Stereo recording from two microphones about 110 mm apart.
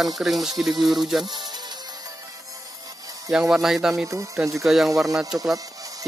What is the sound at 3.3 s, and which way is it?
Speech, 5° right (ahead or behind).